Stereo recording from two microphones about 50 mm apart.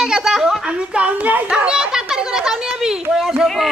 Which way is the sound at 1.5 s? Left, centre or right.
Centre.